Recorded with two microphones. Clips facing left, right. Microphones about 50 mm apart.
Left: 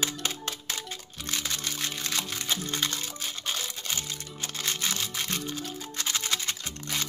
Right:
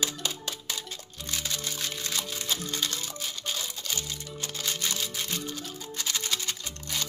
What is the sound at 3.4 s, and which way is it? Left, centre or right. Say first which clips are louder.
Crumpling: left 2 dB; left.